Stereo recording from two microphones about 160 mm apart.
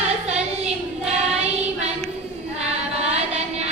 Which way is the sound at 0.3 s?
45° right (ahead or behind).